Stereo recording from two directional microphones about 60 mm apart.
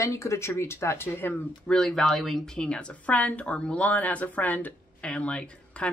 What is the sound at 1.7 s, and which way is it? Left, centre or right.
Speech, centre.